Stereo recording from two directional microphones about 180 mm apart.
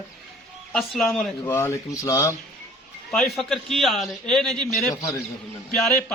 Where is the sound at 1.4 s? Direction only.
15° left (ahead or behind).